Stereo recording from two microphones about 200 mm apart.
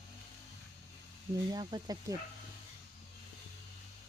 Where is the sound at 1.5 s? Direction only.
20° right (ahead or behind).